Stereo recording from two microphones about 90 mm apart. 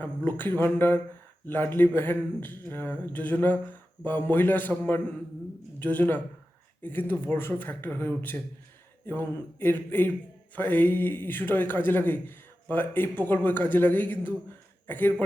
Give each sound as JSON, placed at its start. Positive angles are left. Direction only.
{"t": 0.0, "sound": "speech", "side_deg": 20}